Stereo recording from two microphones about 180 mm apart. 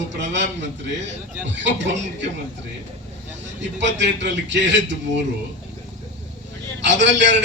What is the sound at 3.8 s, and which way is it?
Speech, 80° right.